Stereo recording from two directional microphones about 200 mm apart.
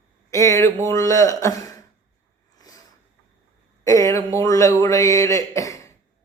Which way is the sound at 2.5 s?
20° left (ahead or behind).